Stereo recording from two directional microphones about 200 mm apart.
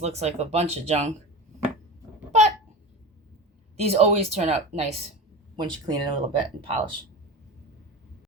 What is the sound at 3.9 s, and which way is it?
Speech, 30° right (ahead or behind).